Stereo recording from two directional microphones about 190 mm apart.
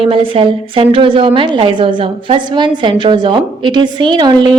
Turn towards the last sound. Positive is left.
turn(degrees=-25)  # may be behind; listen again after turning